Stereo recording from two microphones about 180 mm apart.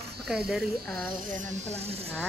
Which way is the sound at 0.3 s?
5° right (ahead or behind).